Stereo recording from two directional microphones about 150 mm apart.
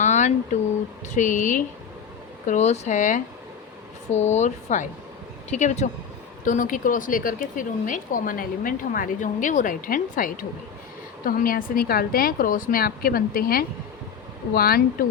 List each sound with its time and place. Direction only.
0.0 s a sound: 55° left (ahead or behind)
1.1 s a woman's voice: 55° left (ahead or behind); by 13.7 s 80° left
14.5 s speech: 90° left